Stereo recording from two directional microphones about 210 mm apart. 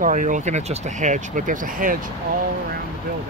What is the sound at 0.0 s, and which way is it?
Speech, 40° right (ahead or behind).